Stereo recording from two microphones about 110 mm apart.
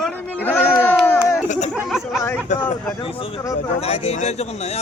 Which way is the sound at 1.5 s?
90° left.